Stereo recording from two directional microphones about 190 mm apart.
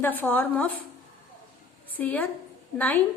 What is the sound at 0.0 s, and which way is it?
Speech, 10° left (ahead or behind).